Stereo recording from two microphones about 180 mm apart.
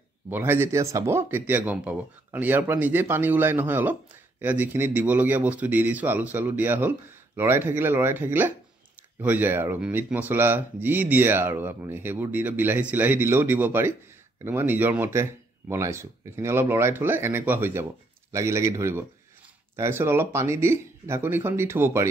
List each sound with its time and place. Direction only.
0.3 s speech: 15° right (ahead or behind)